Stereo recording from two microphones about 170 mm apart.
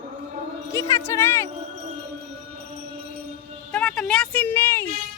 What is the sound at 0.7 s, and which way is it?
Speech, 20° left (ahead or behind).